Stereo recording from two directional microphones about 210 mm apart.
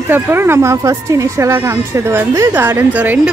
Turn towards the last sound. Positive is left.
turn(degrees=-5)  # may be behind; listen again after turning